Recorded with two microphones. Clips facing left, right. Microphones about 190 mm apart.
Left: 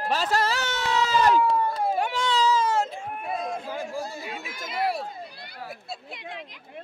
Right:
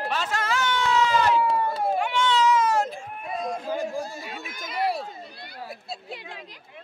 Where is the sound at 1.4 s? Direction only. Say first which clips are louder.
Left 1 dB; centre (ahead or behind).